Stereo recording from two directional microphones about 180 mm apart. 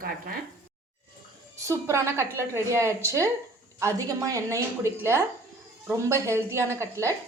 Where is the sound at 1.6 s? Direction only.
15° right (ahead or behind).